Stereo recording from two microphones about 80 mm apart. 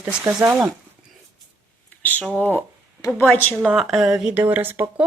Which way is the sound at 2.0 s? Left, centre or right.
Left.